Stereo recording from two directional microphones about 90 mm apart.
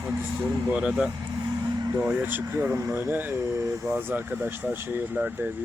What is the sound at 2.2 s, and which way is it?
Speech, 20° right (ahead or behind).